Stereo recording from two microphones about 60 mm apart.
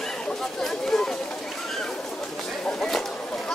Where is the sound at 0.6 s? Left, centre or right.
Centre.